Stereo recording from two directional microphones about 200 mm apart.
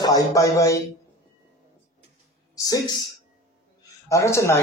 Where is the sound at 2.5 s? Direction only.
20° left (ahead or behind).